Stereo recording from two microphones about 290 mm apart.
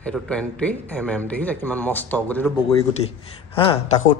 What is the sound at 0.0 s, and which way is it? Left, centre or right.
Speech, centre.